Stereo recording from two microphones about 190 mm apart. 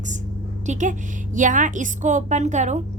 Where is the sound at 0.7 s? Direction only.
40° right (ahead or behind).